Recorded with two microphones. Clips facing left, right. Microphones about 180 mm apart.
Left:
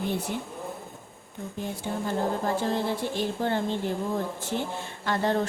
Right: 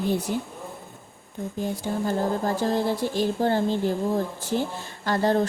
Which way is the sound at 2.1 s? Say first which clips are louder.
Right 2 dB; 40° right (ahead or behind).